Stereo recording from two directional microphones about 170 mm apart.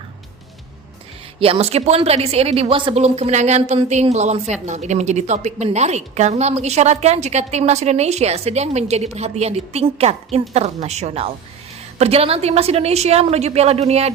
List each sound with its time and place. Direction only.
1.4 s a woman's voice: 35° right (ahead or behind)